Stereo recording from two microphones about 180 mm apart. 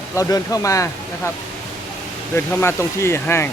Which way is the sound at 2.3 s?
15° left (ahead or behind).